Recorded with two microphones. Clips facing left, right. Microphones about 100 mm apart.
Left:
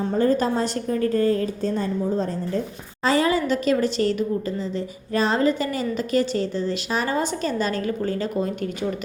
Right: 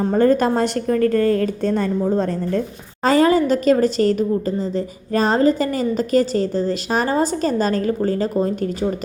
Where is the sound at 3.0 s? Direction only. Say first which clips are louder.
Right 5 dB; 45° right (ahead or behind).